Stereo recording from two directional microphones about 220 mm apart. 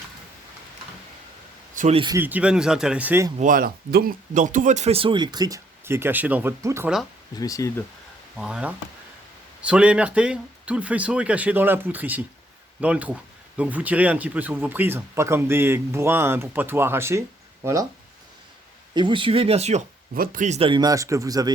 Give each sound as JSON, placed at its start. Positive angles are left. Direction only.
{"t": 1.7, "sound": "a sound", "side_deg": -35}
{"t": 2.0, "sound": "speech", "side_deg": -15}
{"t": 3.3, "sound": "speech", "side_deg": -35}
{"t": 7.3, "sound": "speech", "side_deg": 15}
{"t": 8.4, "sound": "speech", "side_deg": -5}
{"t": 18.9, "sound": "speech", "side_deg": -20}